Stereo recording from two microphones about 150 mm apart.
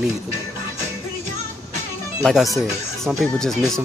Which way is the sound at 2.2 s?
Centre (ahead or behind).